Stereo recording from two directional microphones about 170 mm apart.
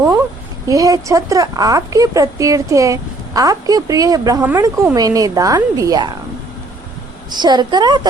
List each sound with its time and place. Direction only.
0.7 s speech: 20° right (ahead or behind)
7.3 s speech: 25° right (ahead or behind)